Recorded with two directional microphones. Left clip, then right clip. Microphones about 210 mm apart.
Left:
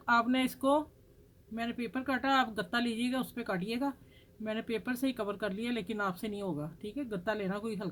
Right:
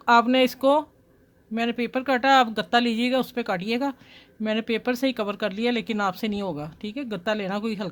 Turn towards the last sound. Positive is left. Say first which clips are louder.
# right 8 dB
turn(degrees=-45)  # may be behind; listen again after turning